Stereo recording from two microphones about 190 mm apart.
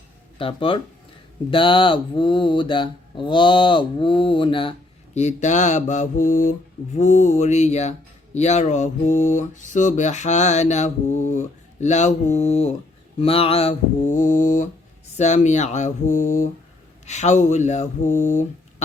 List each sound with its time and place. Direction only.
0.3 s speech: 25° left (ahead or behind)
5.1 s mantra: 40° left (ahead or behind)